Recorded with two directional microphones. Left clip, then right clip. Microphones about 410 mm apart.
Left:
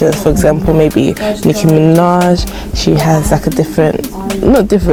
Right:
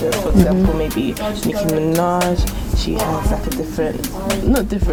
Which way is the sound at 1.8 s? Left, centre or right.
Left.